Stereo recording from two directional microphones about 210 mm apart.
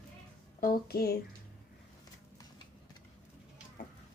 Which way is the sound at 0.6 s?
45° left (ahead or behind).